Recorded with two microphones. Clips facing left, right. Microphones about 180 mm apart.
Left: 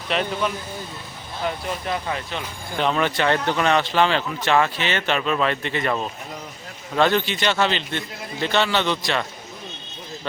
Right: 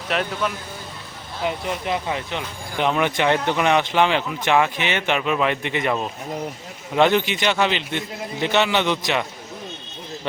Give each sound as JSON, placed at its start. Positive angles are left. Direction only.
{"t": 0.1, "sound": "speech", "side_deg": -5}
{"t": 1.5, "sound": "speech", "side_deg": -15}